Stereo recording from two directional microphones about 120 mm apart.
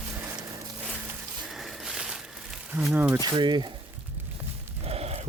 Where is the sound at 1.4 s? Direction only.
Centre (ahead or behind).